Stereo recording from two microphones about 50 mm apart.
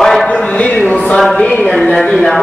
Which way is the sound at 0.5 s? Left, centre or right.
Left.